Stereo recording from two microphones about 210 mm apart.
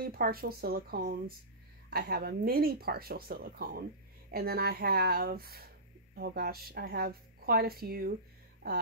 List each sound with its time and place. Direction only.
0.0 s a woman's voice: 45° right (ahead or behind)